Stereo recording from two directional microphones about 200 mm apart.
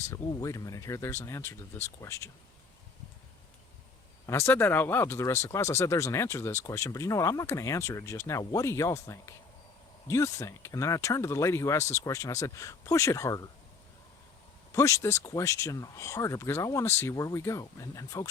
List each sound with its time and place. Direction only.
0.0 s speech: 15° left (ahead or behind)
4.3 s speech: 15° left (ahead or behind)
14.7 s speech: 15° left (ahead or behind)